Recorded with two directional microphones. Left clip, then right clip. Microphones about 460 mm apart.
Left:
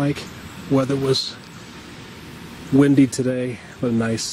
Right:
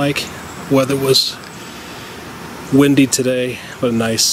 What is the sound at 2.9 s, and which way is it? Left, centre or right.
Speech, centre.